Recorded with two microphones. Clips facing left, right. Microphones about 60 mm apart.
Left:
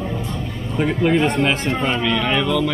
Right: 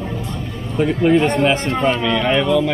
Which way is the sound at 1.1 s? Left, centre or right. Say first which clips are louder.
Right 3 dB; centre.